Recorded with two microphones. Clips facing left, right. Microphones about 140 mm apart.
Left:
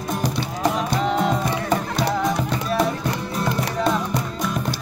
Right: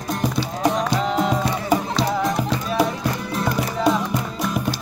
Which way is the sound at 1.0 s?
Centre (ahead or behind).